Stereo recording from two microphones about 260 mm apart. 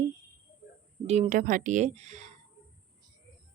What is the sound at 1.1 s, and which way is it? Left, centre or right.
Speech, right.